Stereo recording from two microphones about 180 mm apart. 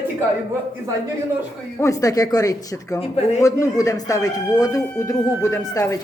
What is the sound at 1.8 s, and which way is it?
Speech, 15° left (ahead or behind).